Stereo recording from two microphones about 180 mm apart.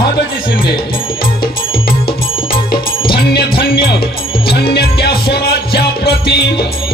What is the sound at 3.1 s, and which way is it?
Music, 60° left (ahead or behind).